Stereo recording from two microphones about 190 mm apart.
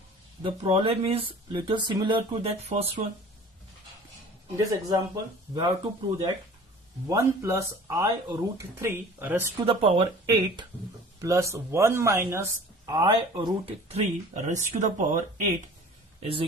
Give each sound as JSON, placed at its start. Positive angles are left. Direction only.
{"t": 0.4, "sound": "speech", "side_deg": -30}
{"t": 4.5, "sound": "speech", "side_deg": -20}
{"t": 9.6, "sound": "speech", "side_deg": -30}
{"t": 11.2, "sound": "speech", "side_deg": -15}